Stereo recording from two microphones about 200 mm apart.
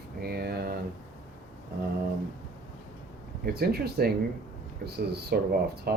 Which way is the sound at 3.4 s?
50° right (ahead or behind).